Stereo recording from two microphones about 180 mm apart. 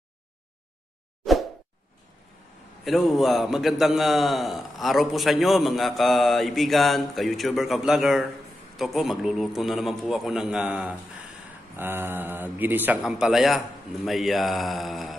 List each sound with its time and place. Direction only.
2.8 s a man's voice: centre (ahead or behind)